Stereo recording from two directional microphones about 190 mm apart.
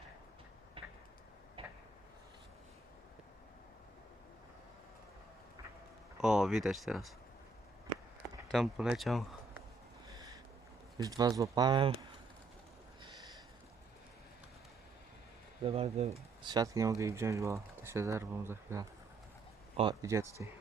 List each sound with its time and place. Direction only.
0.8 s tick-tock: 25° right (ahead or behind)
1.6 s a sound: 30° right (ahead or behind)
6.2 s speech: centre (ahead or behind)
8.5 s speech: 5° right (ahead or behind)
10.1 s a sound: 20° right (ahead or behind)
10.9 s speech: 20° right (ahead or behind)
15.6 s speech: 30° right (ahead or behind); by 18.9 s 15° right (ahead or behind)
19.7 s speech: 25° right (ahead or behind)